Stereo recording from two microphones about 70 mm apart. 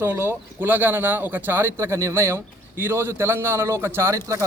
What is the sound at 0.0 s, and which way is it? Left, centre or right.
Speech, right.